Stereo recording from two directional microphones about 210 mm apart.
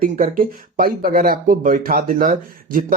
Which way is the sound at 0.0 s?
40° right (ahead or behind).